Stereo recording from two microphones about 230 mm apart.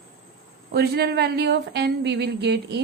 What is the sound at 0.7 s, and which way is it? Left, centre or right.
Speech, right.